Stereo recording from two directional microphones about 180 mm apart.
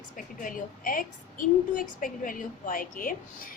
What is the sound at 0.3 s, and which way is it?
A woman's voice, 50° left (ahead or behind).